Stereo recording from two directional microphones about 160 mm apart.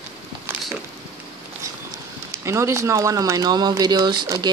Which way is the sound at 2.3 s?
20° right (ahead or behind).